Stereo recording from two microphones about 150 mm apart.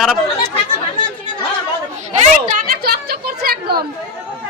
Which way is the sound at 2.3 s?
55° right (ahead or behind).